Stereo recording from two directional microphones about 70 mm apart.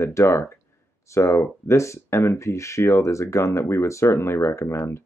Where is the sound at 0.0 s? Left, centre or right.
Left.